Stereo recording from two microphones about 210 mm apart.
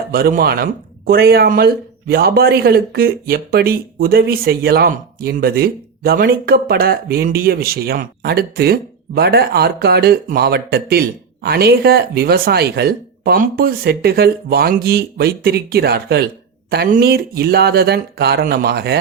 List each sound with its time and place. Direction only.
0.1 s speech: 45° right (ahead or behind)